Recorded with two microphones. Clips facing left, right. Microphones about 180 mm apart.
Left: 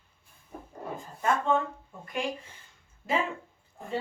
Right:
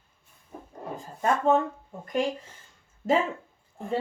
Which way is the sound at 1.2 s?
40° right (ahead or behind).